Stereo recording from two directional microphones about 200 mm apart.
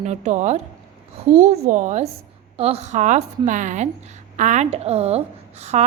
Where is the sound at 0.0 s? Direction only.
35° right (ahead or behind).